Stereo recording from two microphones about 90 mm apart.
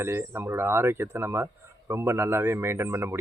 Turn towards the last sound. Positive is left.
turn(degrees=-30)  # may be behind; listen again after turning